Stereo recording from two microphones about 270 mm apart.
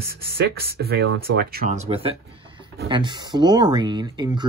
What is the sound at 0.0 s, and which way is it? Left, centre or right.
Speech, right.